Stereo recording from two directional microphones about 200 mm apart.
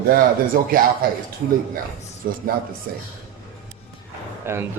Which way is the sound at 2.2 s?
45° right (ahead or behind).